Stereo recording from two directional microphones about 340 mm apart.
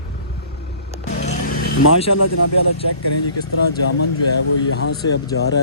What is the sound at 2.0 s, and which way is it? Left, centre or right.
Speech, left.